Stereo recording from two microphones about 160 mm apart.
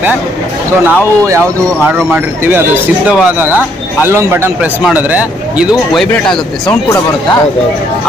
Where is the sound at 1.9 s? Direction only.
10° right (ahead or behind).